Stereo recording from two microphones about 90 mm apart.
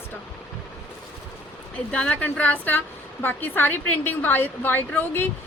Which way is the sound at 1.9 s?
15° left (ahead or behind).